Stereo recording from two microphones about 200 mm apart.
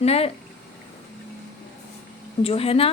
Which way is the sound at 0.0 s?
30° left (ahead or behind).